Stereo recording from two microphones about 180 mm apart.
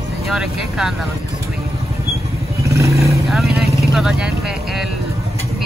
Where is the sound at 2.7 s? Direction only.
15° right (ahead or behind).